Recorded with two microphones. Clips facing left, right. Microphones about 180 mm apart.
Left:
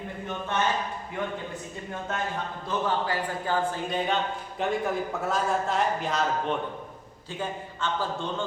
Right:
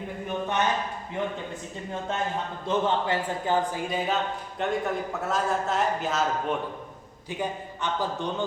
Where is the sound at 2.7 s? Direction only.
25° right (ahead or behind); by 6.5 s 5° right (ahead or behind).